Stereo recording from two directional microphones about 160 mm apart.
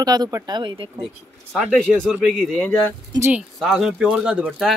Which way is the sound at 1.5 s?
5° left (ahead or behind).